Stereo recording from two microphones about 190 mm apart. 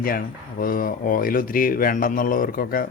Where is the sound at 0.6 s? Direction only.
50° left (ahead or behind).